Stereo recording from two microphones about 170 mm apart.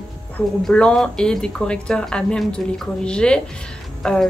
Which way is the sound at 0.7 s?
5° left (ahead or behind).